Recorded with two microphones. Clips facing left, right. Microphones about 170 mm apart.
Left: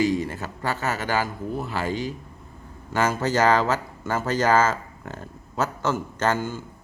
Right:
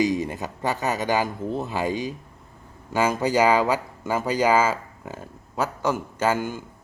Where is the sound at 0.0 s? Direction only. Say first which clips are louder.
Even; 20° right (ahead or behind).